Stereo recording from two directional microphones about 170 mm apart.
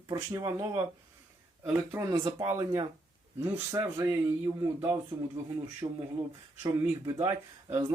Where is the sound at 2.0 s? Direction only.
20° right (ahead or behind).